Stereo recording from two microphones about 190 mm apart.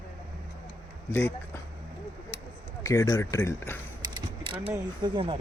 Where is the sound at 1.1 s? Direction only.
10° left (ahead or behind).